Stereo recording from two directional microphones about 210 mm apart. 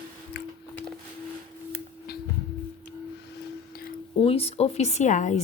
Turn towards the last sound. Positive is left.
turn(degrees=35)  # may be behind; listen again after turning